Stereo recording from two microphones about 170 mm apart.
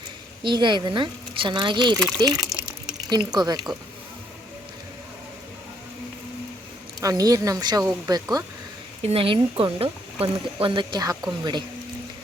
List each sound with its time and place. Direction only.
0.4 s speech: 25° right (ahead or behind)
2.0 s speech: 5° left (ahead or behind)
2.2 s speech: 20° right (ahead or behind)
7.0 s speech: 20° right (ahead or behind)
9.0 s speech: 30° right (ahead or behind)